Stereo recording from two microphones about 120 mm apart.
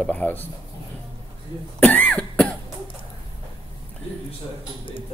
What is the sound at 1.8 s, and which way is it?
Cough, 10° left (ahead or behind).